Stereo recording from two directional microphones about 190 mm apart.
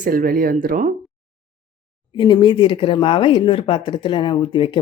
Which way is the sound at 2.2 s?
25° left (ahead or behind).